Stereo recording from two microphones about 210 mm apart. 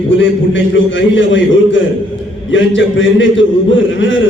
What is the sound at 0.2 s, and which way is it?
A man's voice, 65° left (ahead or behind).